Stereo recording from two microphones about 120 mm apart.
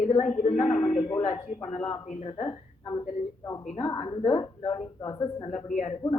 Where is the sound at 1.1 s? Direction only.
60° left (ahead or behind).